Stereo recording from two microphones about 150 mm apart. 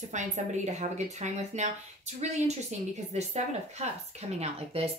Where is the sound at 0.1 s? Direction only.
50° right (ahead or behind).